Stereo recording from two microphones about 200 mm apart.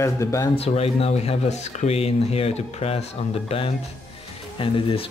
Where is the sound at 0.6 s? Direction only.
30° left (ahead or behind).